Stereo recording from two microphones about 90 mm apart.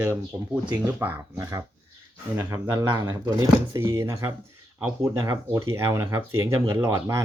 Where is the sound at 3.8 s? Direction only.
30° right (ahead or behind).